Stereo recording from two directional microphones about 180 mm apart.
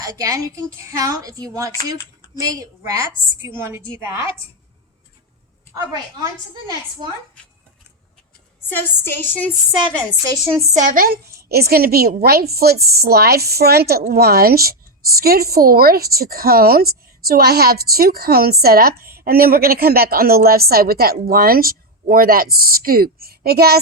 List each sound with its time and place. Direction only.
0.0 s a child's voice: 20° right (ahead or behind)
8.7 s a woman's voice: 10° left (ahead or behind)
10.6 s a woman's voice: 45° right (ahead or behind); by 23.8 s 60° right (ahead or behind)